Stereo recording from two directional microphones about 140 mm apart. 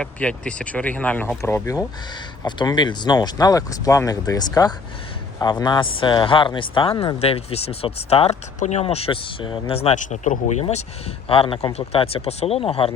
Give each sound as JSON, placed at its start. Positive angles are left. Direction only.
{"t": 0.0, "sound": "speech", "side_deg": 10}
{"t": 8.5, "sound": "speech", "side_deg": 55}
{"t": 11.3, "sound": "speech", "side_deg": 40}